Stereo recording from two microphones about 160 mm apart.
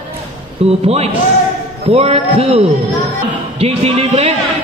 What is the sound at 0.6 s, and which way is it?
A man's voice, 40° right (ahead or behind).